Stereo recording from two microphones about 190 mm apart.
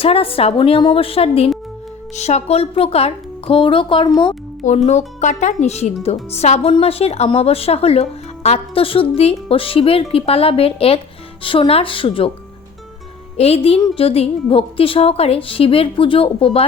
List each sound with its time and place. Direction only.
0.0 s a woman's voice: 30° left (ahead or behind)
4.9 s a woman's voice: 40° left (ahead or behind)
13.3 s a woman's voice: 35° left (ahead or behind)